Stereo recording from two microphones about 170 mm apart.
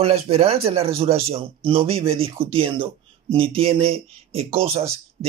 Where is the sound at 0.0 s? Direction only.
35° right (ahead or behind).